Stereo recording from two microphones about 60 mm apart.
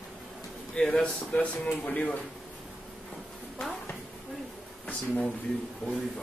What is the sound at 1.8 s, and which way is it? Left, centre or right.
Speech, left.